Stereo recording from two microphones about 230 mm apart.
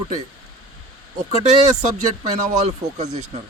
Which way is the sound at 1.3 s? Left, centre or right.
Right.